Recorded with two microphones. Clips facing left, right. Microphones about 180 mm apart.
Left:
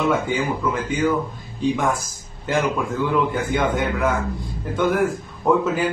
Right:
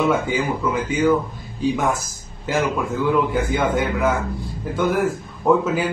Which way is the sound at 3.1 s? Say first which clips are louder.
Right 3 dB; centre (ahead or behind).